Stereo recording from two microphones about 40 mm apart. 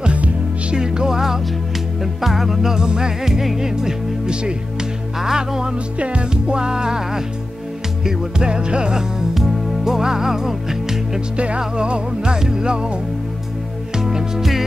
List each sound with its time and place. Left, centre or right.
0.0 s music: right
0.7 s music: centre
5.9 s music: right
9.3 s music: centre
11.3 s music: right
13.9 s music: centre